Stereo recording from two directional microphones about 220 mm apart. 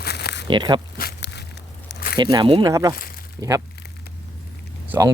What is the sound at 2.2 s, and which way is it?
Speech, 20° right (ahead or behind).